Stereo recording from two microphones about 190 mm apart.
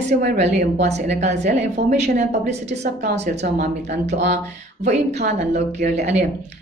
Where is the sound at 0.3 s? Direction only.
40° right (ahead or behind).